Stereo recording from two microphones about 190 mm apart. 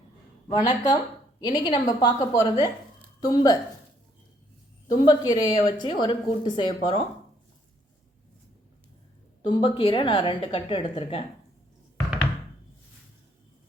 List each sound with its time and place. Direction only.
0.4 s a woman's voice: 20° left (ahead or behind)
5.0 s speech: 20° left (ahead or behind)
9.5 s speech: 25° left (ahead or behind)